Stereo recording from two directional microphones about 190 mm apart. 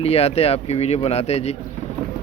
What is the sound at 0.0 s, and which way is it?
Speech, 30° left (ahead or behind).